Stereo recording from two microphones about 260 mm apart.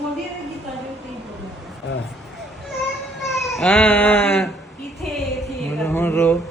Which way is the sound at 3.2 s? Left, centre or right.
Centre.